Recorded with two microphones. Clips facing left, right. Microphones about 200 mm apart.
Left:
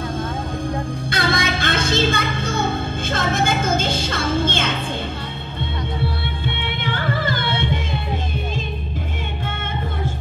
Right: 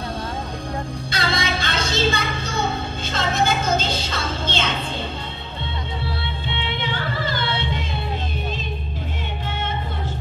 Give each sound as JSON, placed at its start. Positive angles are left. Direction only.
{"t": 1.1, "sound": "music", "side_deg": 55}
{"t": 6.8, "sound": "carnatic music", "side_deg": 50}